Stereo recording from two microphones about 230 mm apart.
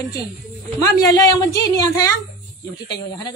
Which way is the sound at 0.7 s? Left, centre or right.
Centre.